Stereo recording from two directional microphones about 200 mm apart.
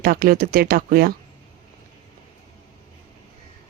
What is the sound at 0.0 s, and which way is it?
Speech, 45° right (ahead or behind).